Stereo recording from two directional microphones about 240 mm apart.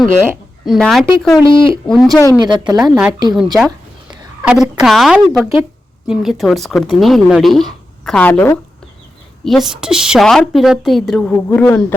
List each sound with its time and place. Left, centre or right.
0.2 s speech: centre
1.5 s speech: left
1.9 s a woman's voice: centre
2.4 s speech: centre
3.3 s a woman's voice: centre